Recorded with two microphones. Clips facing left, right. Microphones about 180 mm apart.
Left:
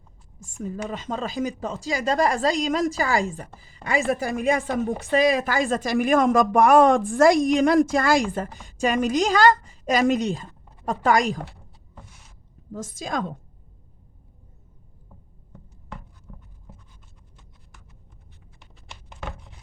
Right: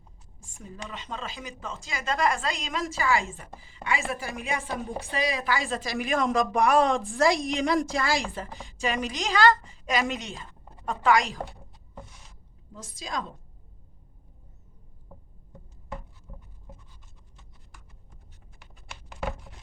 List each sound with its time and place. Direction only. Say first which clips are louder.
0.3 s a woman's voice: left 11 dB; 45° left (ahead or behind)
4.6 s a woman's voice: left 8 dB; 55° left (ahead or behind)
12.7 s speech: left 6 dB; 50° left (ahead or behind)